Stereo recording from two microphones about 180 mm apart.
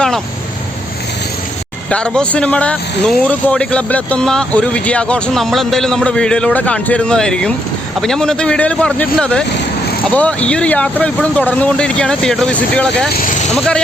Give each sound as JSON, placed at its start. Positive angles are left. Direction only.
{"t": 1.9, "sound": "a man's voice", "side_deg": 5}